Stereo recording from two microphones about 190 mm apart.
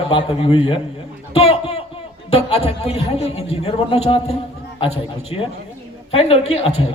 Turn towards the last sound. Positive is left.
turn(degrees=30)  # may be behind; listen again after turning